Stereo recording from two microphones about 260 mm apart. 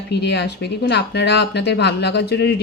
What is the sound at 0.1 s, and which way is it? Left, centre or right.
Speech, left.